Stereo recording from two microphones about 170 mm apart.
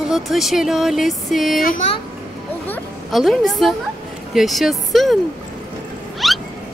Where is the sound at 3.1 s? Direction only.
Centre (ahead or behind).